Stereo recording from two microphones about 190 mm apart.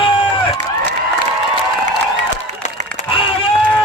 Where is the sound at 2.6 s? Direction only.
40° left (ahead or behind).